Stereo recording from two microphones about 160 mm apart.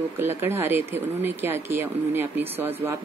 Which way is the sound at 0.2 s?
15° right (ahead or behind).